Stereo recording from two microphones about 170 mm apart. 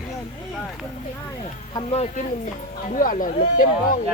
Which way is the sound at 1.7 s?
30° left (ahead or behind).